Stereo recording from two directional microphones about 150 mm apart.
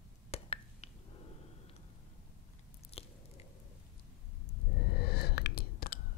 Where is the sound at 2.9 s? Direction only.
40° left (ahead or behind).